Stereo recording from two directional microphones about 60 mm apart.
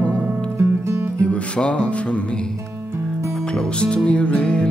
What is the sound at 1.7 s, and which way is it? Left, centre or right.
Mantra, centre.